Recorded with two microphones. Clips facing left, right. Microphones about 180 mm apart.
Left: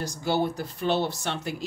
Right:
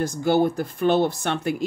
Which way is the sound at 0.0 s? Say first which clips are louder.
Right 6 dB; 50° right (ahead or behind).